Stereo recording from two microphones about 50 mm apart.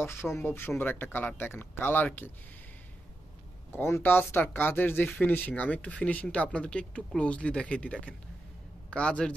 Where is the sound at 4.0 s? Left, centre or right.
Left.